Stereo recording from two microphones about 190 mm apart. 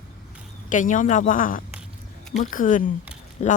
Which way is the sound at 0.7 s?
40° left (ahead or behind).